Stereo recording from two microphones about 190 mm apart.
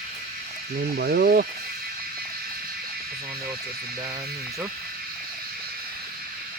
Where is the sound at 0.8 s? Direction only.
55° right (ahead or behind).